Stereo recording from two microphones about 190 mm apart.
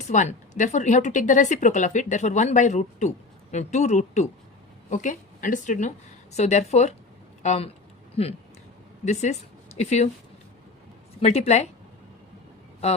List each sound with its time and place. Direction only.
0.1 s speech: 40° left (ahead or behind)
9.7 s speech: 35° left (ahead or behind)
11.2 s speech: 35° left (ahead or behind)